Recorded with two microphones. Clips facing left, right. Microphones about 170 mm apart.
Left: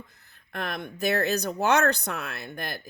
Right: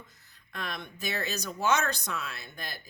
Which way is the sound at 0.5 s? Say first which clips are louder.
Left 5 dB; 55° left (ahead or behind).